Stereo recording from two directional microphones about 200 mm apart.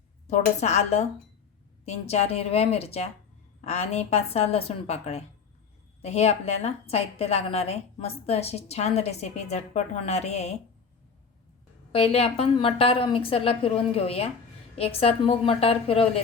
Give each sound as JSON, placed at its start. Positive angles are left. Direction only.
{"t": 0.3, "sound": "a woman's voice", "side_deg": 35}
{"t": 11.9, "sound": "a woman's voice", "side_deg": 30}